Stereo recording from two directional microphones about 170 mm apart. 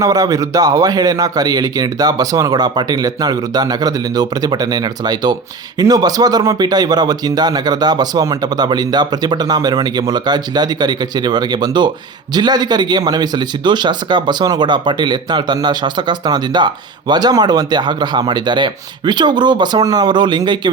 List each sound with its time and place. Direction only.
0.0 s speech: 20° right (ahead or behind)